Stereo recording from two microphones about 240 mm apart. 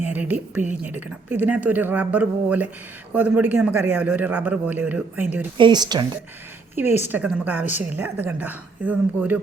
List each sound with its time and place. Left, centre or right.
0.1 s a woman's voice: centre
5.5 s a woman's voice: centre